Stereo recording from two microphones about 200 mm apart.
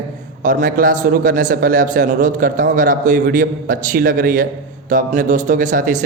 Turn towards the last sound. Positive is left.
turn(degrees=-40)  # may be behind; listen again after turning